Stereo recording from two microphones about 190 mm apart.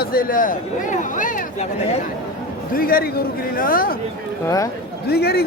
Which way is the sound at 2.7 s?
50° left (ahead or behind).